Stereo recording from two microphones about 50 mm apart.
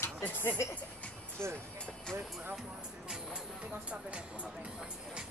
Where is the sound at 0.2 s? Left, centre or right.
Left.